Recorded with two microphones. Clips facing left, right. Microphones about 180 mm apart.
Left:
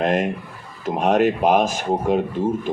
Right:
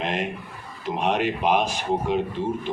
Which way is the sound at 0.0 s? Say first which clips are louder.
Left 7 dB; 45° left (ahead or behind).